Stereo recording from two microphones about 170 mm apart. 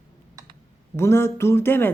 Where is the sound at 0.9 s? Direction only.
15° left (ahead or behind).